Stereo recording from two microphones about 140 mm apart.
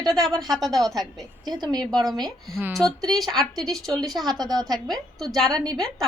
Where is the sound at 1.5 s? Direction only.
30° right (ahead or behind).